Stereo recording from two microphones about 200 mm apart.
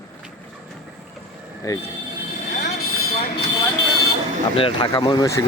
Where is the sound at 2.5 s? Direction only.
45° left (ahead or behind).